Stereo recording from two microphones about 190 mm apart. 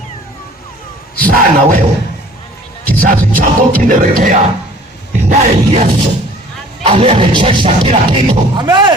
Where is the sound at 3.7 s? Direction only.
50° right (ahead or behind).